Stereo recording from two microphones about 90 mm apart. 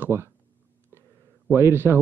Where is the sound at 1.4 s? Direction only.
25° right (ahead or behind).